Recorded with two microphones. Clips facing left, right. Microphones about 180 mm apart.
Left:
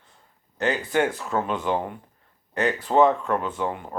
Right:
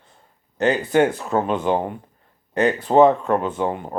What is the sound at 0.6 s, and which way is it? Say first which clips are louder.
Speech: right 6 dB; 20° right (ahead or behind).